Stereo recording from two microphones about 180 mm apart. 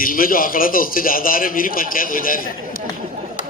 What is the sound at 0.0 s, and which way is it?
A man's voice, 50° left (ahead or behind).